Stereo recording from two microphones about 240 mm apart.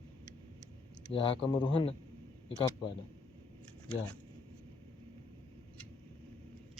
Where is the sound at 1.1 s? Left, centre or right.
Left.